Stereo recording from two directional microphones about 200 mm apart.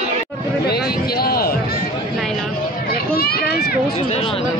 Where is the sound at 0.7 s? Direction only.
50° left (ahead or behind).